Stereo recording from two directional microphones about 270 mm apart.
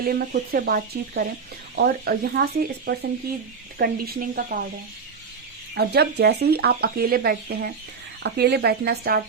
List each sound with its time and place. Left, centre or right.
0.0 s speech: right
5.7 s speech: right